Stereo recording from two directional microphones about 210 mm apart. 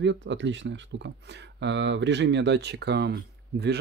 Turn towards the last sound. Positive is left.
turn(degrees=-50)  # may be behind; listen again after turning